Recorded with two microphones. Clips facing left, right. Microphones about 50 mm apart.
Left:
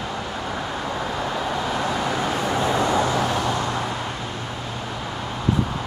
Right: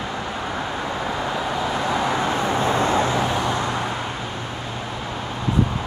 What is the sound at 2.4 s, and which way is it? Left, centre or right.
Vehicle, right.